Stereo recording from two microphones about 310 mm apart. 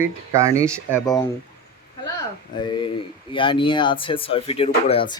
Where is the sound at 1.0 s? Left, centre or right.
Centre.